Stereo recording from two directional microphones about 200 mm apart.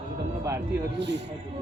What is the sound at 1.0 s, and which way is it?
Music, 60° right (ahead or behind).